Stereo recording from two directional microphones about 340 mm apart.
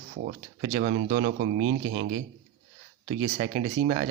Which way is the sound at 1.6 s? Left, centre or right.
Right.